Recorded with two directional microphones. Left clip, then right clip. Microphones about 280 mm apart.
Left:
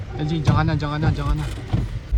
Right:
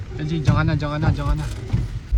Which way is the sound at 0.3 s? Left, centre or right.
Centre.